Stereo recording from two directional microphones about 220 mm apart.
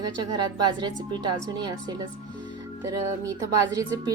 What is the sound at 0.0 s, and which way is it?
A woman's voice, 20° right (ahead or behind).